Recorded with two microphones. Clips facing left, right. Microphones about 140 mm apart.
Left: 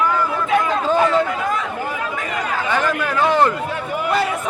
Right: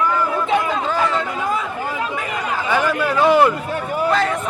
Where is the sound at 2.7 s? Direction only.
10° right (ahead or behind).